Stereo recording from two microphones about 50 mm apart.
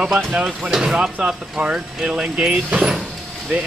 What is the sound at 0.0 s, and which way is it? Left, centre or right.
Speech, centre.